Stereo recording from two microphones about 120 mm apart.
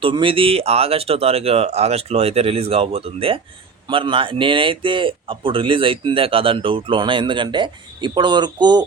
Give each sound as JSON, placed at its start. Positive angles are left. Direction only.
{"t": 0.0, "sound": "speech", "side_deg": -45}